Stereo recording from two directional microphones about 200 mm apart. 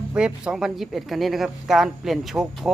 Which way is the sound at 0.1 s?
5° right (ahead or behind).